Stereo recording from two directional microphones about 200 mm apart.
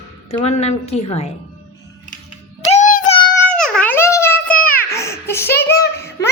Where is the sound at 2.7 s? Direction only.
40° left (ahead or behind).